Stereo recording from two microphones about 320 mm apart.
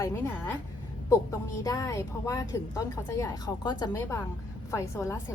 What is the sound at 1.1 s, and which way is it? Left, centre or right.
A woman's voice, centre.